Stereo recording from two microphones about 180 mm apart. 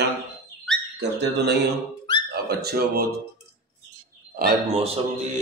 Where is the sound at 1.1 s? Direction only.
65° right (ahead or behind).